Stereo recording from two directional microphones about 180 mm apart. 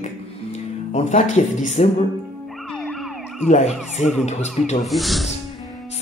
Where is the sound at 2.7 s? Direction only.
Centre (ahead or behind).